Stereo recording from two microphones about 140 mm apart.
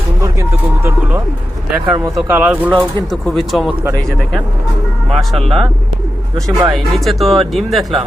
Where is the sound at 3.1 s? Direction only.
Centre (ahead or behind).